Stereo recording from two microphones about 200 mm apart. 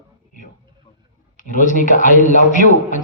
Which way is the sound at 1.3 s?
40° left (ahead or behind).